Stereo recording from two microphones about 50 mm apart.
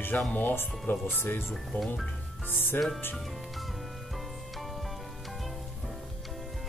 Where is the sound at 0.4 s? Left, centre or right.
Left.